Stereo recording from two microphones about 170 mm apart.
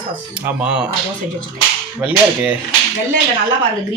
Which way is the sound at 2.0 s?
10° right (ahead or behind).